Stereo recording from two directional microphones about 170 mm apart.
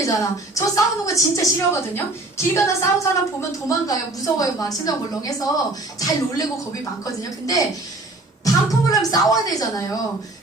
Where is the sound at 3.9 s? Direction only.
20° left (ahead or behind).